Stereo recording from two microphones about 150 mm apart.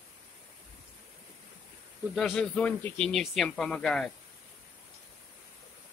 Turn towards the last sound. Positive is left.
turn(degrees=5)  # may be behind; listen again after turning